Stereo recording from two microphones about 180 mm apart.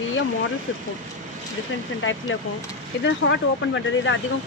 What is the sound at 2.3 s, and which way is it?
Speech, 90° left.